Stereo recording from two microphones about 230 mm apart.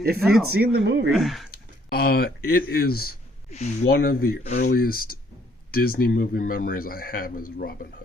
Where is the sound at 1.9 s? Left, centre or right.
Left.